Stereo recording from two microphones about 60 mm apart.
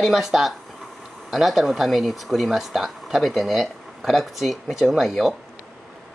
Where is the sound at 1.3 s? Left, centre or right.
Centre.